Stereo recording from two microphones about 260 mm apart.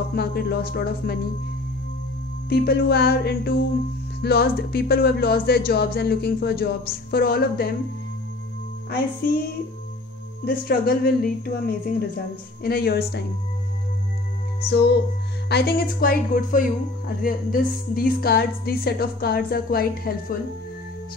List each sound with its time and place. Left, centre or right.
0.1 s a woman's voice: left
2.5 s a woman's voice: left
9.2 s a woman's voice: left
10.4 s a woman's voice: left
14.6 s a woman's voice: left